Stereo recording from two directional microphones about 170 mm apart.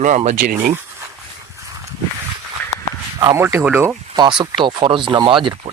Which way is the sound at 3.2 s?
15° right (ahead or behind).